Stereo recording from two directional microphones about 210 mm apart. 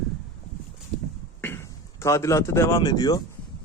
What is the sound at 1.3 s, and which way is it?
Speech, 10° left (ahead or behind).